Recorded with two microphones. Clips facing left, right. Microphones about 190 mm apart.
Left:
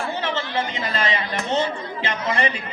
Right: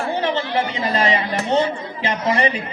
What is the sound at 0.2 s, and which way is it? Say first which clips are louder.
A man's voice: right 5 dB; 35° right (ahead or behind).